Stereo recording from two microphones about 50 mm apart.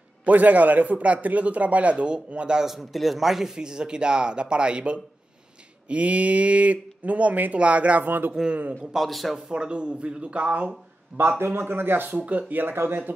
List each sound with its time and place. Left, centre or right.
0.2 s a man's voice: right
2.6 s a man's voice: centre; by 8.1 s right
8.4 s speech: centre
8.9 s speech: centre
9.5 s a man's voice: centre
11.1 s speech: right
12.2 s speech: right